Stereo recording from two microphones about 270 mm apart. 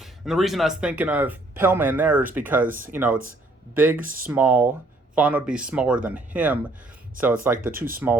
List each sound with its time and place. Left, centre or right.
0.0 s speech: centre
2.6 s speech: right
2.9 s speech: centre
4.0 s speech: right
4.3 s speech: centre
7.5 s speech: right
7.9 s speech: centre